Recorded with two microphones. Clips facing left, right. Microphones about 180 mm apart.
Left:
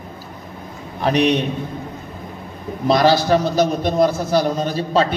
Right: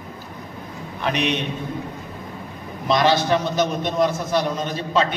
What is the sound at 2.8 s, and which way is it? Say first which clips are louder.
A man's voice: left 4 dB; 35° left (ahead or behind).